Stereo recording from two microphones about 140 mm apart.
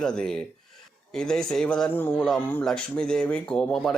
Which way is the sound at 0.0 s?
5° left (ahead or behind).